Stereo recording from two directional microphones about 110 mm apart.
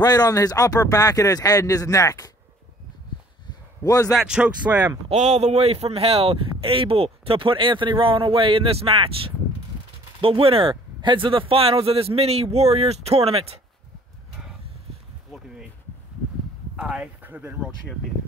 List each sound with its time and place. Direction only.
0.0 s speech: 35° left (ahead or behind)
3.8 s speech: 30° left (ahead or behind)
4.1 s speech: centre (ahead or behind)
4.4 s speech: 10° right (ahead or behind)
5.0 s a man's voice: 85° right; by 13.6 s 65° right (ahead or behind)
15.3 s insect: 5° right (ahead or behind)
16.7 s speech: 10° right (ahead or behind)